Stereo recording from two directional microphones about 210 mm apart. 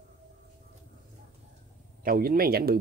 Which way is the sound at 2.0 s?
45° right (ahead or behind).